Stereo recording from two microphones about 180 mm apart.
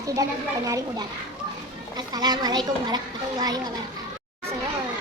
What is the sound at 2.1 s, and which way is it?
Speech, 20° right (ahead or behind).